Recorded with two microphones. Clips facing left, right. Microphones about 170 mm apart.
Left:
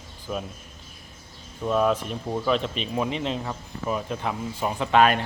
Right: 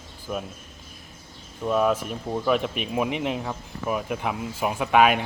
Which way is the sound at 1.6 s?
5° right (ahead or behind).